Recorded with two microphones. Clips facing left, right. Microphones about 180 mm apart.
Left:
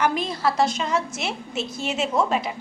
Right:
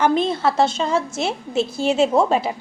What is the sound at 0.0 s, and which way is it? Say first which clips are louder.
A woman's voice: right 5 dB; 25° right (ahead or behind).